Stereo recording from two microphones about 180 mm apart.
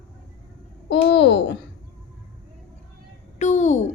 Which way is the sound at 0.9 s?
75° left (ahead or behind).